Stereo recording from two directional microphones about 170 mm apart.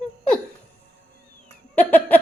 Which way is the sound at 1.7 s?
10° left (ahead or behind).